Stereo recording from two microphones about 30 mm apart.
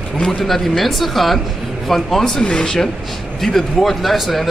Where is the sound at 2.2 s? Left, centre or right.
Left.